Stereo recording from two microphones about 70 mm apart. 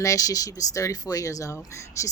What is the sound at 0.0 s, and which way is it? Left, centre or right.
Speech, left.